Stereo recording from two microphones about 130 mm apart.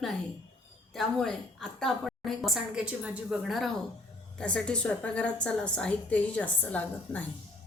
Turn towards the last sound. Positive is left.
turn(degrees=10)  # may be behind; listen again after turning